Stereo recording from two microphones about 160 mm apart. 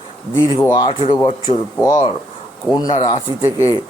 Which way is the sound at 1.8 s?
20° left (ahead or behind).